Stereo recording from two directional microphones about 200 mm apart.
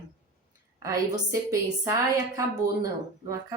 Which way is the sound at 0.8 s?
15° right (ahead or behind).